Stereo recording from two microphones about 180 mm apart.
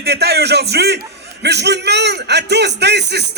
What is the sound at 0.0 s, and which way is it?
A man's voice, 65° right (ahead or behind).